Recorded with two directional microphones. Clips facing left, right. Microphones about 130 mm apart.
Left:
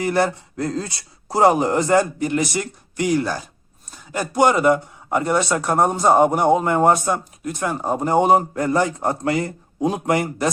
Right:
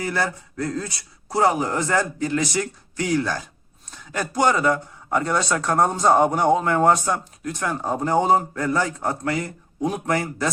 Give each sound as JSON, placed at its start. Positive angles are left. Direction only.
{"t": 0.0, "sound": "a man's voice", "side_deg": 25}